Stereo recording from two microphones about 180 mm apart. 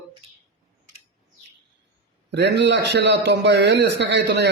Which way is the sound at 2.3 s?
75° right (ahead or behind).